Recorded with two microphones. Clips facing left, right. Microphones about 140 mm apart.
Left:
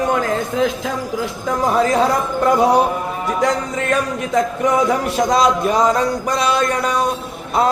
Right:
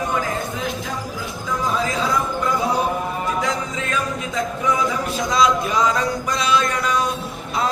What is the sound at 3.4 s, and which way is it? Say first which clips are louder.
Music: left 6 dB; 60° left (ahead or behind).